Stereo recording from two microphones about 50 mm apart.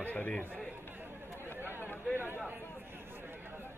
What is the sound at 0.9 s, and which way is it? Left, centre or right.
Chatter, right.